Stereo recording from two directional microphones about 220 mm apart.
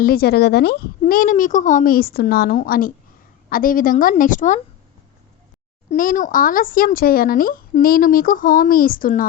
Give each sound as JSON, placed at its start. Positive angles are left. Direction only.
{"t": 0.0, "sound": "speech", "side_deg": 45}
{"t": 5.9, "sound": "speech", "side_deg": 35}